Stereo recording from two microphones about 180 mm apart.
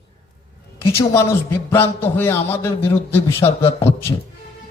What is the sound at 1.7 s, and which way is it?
A man's voice, 10° left (ahead or behind).